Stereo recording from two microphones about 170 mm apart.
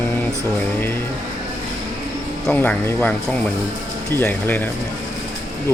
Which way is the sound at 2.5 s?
10° left (ahead or behind).